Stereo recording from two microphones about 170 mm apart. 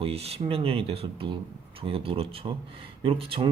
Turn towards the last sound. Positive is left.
turn(degrees=-30)  # may be behind; listen again after turning